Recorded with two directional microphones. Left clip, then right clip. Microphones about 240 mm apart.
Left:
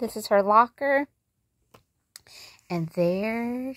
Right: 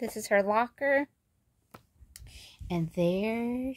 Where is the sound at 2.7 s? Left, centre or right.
Centre.